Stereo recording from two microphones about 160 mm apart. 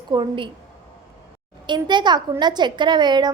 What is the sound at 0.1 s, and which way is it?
Speech, 30° right (ahead or behind).